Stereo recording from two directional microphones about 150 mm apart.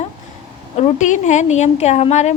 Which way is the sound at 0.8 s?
55° left (ahead or behind).